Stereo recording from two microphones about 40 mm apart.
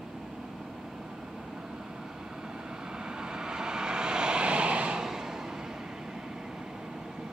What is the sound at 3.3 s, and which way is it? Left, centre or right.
Vehicle, centre.